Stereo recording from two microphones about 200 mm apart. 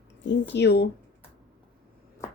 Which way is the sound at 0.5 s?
55° left (ahead or behind).